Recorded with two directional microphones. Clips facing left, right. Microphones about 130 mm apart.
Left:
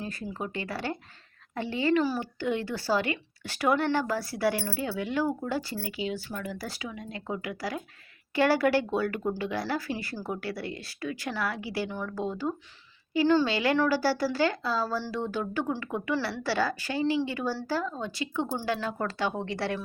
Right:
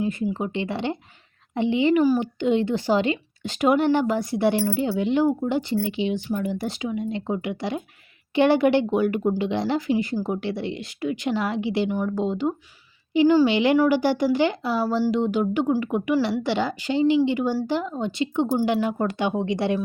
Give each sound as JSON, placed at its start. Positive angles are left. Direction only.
{"t": 0.0, "sound": "speech", "side_deg": -20}